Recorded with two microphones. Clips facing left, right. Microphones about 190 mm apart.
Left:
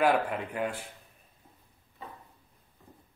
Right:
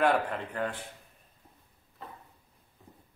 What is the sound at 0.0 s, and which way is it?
Speech, 5° left (ahead or behind).